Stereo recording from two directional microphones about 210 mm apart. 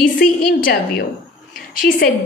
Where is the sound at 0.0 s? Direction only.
40° left (ahead or behind).